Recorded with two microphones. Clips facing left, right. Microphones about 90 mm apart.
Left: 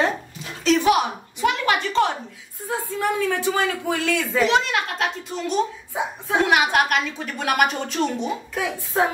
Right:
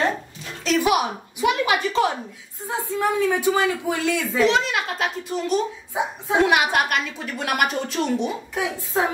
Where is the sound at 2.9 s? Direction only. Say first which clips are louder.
Right 2 dB; 15° right (ahead or behind).